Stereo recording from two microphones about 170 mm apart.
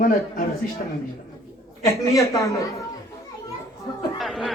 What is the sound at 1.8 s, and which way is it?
Speech, 20° left (ahead or behind).